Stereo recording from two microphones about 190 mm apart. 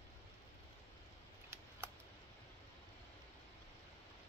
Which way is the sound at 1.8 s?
10° right (ahead or behind).